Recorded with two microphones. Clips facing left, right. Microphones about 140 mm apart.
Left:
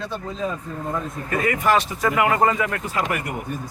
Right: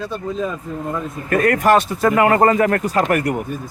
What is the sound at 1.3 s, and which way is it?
Speech, 65° right (ahead or behind).